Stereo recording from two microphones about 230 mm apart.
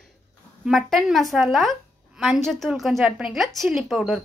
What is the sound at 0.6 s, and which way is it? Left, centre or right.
Speech, centre.